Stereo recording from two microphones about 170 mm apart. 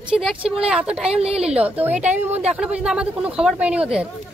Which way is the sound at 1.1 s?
35° right (ahead or behind).